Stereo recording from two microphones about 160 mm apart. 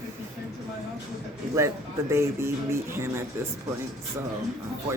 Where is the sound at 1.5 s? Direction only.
15° right (ahead or behind).